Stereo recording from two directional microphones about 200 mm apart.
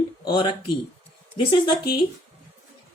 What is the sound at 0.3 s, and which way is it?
Speech, 25° left (ahead or behind).